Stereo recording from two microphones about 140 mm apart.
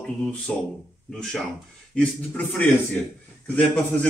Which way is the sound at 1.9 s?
10° left (ahead or behind).